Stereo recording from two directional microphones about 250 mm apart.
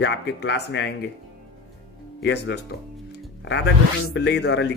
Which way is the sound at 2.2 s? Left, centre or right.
Left.